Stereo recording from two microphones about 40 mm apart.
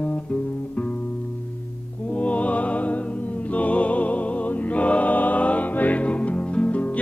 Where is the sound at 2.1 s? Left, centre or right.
Left.